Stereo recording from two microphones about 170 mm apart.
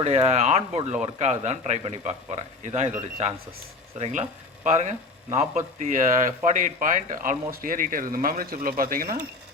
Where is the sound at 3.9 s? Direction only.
40° right (ahead or behind); by 9.2 s 55° right (ahead or behind).